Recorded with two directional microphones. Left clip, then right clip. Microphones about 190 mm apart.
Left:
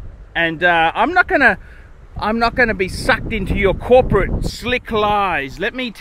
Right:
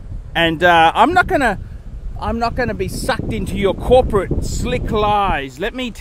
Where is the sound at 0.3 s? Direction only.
25° right (ahead or behind); by 1.6 s 10° right (ahead or behind).